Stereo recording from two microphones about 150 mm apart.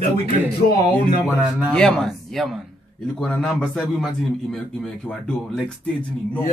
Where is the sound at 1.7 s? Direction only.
5° left (ahead or behind).